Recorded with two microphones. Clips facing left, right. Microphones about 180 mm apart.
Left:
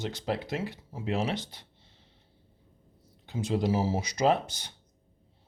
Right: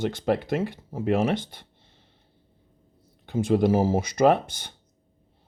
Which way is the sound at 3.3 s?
55° right (ahead or behind).